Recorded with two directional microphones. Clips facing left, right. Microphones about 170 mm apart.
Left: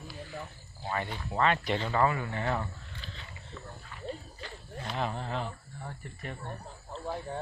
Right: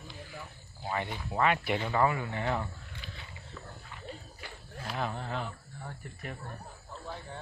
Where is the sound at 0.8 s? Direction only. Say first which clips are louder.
Even; 15° right (ahead or behind).